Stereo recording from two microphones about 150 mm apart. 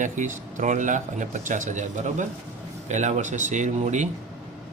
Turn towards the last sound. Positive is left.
turn(degrees=-50)  # may be behind; listen again after turning